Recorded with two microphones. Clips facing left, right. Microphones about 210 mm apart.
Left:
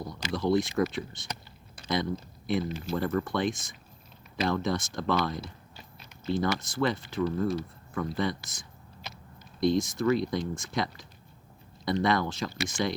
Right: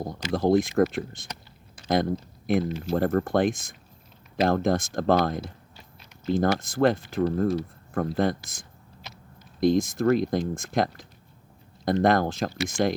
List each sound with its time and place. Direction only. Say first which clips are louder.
0.0 s speech: right 5 dB; 50° right (ahead or behind)
9.6 s speech: right 4 dB; 45° right (ahead or behind)